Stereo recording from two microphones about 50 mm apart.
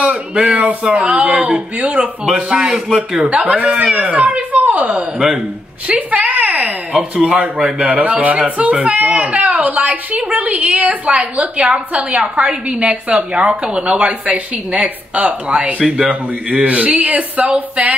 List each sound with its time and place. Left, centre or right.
0.0 s a woman's voice: right
3.2 s a woman's voice: right
5.9 s a sound: right
7.2 s a woman's voice: right